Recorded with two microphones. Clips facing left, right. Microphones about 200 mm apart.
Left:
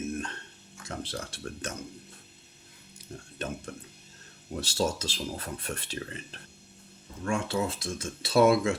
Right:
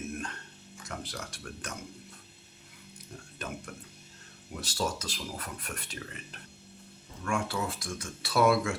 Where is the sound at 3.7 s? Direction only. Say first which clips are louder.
Left 4 dB; 30° left (ahead or behind).